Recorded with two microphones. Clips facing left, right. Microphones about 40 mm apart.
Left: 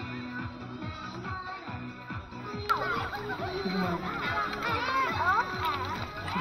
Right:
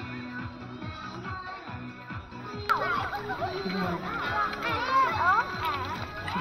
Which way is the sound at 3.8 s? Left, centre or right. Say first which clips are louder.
Right 1 dB; centre.